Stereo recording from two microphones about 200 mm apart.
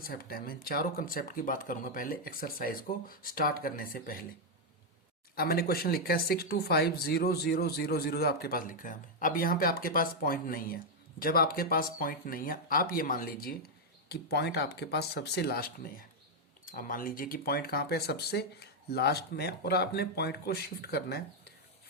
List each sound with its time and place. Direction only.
0.0 s speech: 50° left (ahead or behind)
5.3 s speech: 50° left (ahead or behind)